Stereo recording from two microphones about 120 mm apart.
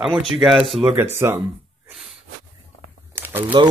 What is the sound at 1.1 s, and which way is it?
Speech, 20° right (ahead or behind).